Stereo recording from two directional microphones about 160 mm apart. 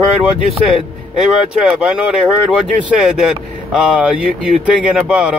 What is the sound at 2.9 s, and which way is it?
Speech, 5° right (ahead or behind).